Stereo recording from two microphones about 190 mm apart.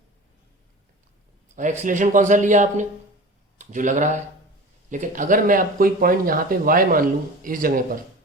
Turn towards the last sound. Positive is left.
turn(degrees=-45)  # may be behind; listen again after turning